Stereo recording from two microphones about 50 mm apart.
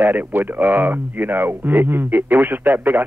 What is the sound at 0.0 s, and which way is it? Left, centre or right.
Speech, right.